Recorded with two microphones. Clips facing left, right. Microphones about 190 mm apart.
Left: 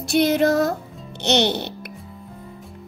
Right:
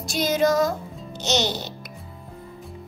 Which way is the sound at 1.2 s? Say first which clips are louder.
Left 5 dB; 60° left (ahead or behind).